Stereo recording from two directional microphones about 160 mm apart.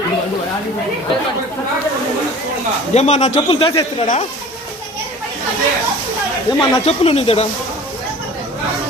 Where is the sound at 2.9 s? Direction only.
45° left (ahead or behind).